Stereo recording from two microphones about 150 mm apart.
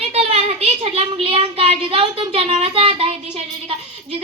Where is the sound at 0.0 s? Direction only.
45° right (ahead or behind).